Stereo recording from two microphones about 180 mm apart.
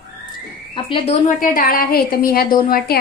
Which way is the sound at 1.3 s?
50° left (ahead or behind).